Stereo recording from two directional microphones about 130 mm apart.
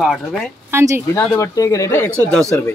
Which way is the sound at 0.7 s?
20° right (ahead or behind).